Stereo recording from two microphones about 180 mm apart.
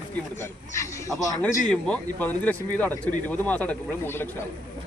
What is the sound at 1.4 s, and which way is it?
A man's voice, 5° left (ahead or behind).